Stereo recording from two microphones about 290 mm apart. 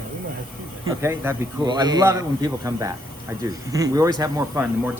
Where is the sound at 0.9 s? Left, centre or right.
Centre.